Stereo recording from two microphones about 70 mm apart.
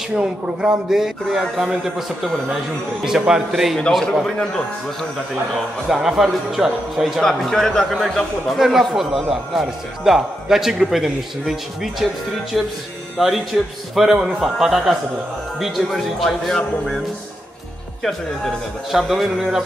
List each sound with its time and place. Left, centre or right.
0.1 s a man's voice: centre
4.0 s a man's voice: centre
5.9 s a man's voice: centre
18.9 s a man's voice: centre